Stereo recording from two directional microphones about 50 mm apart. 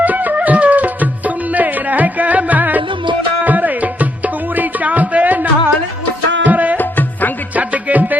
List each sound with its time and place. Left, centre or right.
0.0 s music: right
6.5 s music: right